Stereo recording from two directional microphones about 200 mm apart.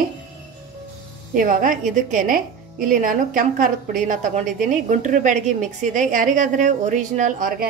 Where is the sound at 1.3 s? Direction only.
40° right (ahead or behind).